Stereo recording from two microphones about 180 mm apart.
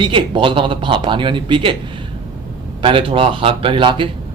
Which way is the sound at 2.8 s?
30° right (ahead or behind).